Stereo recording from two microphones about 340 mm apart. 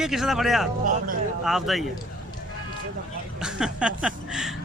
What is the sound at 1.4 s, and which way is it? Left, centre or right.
Speech, centre.